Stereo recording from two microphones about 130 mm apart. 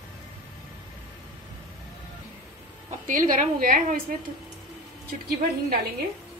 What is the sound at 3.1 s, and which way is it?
Speech, 85° right.